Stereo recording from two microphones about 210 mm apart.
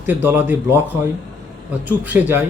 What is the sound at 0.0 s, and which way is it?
Speech, 10° right (ahead or behind).